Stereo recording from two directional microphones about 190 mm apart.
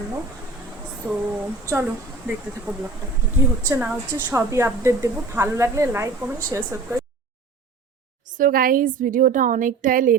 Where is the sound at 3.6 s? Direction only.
10° right (ahead or behind).